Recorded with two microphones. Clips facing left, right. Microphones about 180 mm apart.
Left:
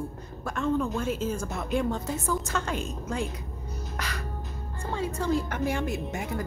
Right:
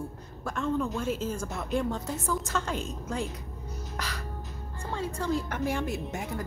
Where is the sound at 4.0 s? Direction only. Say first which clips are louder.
Left 1 dB; centre (ahead or behind).